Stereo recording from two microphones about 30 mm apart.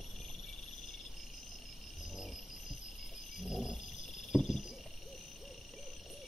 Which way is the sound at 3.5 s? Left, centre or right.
Centre.